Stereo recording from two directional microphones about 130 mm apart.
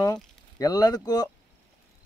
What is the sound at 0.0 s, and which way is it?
Speech, 30° left (ahead or behind).